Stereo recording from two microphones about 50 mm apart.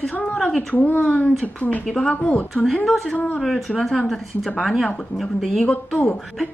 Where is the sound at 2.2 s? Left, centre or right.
Left.